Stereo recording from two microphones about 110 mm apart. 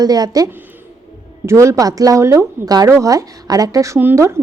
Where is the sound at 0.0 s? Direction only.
35° right (ahead or behind).